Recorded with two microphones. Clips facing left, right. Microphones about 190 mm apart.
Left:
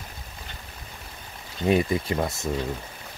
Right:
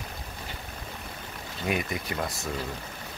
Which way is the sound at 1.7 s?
30° left (ahead or behind).